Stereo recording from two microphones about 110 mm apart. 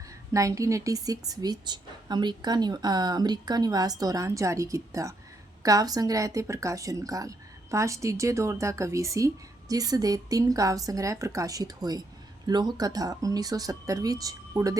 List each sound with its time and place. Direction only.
0.3 s a woman's voice: 30° right (ahead or behind)